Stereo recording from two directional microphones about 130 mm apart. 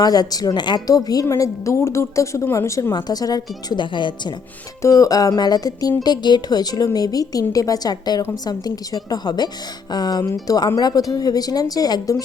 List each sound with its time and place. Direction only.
0.0 s a woman's voice: 30° left (ahead or behind)
4.8 s a woman's voice: 25° left (ahead or behind)